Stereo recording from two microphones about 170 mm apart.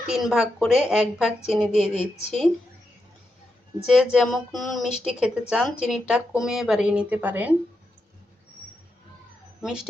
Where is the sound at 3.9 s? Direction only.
Centre (ahead or behind).